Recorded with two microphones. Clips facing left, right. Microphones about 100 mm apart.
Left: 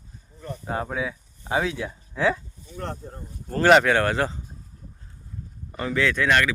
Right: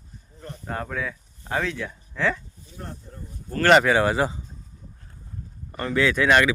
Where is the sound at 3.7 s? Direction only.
5° right (ahead or behind).